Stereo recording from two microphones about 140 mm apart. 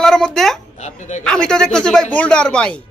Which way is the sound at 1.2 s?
5° left (ahead or behind).